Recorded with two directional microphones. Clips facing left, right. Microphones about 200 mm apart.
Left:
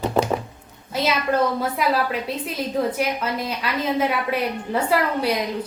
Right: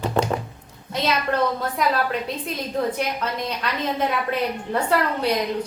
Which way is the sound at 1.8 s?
5° left (ahead or behind).